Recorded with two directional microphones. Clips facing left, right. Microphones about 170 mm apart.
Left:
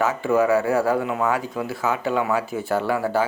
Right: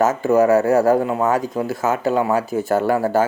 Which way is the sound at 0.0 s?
45° right (ahead or behind).